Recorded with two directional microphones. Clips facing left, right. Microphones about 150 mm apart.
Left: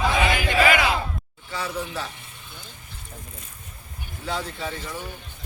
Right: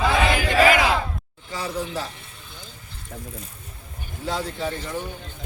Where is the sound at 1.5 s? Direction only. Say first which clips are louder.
Right 2 dB; 35° right (ahead or behind).